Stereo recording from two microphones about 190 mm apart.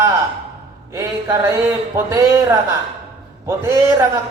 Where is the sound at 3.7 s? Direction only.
15° right (ahead or behind).